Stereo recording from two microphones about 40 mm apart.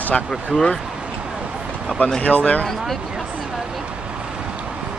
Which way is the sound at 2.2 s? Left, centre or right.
Left.